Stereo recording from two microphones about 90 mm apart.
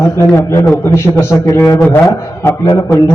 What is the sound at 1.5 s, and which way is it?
Speech, 30° left (ahead or behind).